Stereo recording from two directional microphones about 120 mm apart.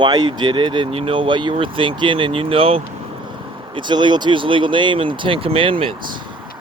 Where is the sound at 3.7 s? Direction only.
40° right (ahead or behind).